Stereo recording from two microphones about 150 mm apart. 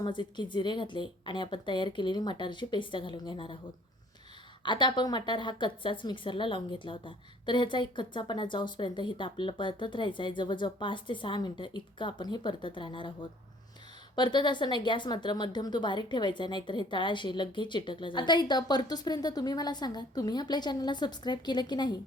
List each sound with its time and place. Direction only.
0.0 s a woman's voice: 30° left (ahead or behind)
4.6 s a woman's voice: 30° left (ahead or behind)
14.2 s speech: 30° left (ahead or behind)